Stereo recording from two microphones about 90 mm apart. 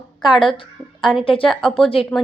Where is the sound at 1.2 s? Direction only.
75° left (ahead or behind).